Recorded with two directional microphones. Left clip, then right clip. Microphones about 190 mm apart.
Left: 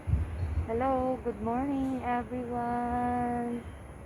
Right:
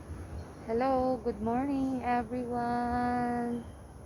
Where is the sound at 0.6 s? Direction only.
5° right (ahead or behind).